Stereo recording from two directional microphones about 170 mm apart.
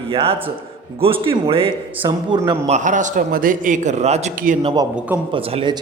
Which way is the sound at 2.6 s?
45° right (ahead or behind).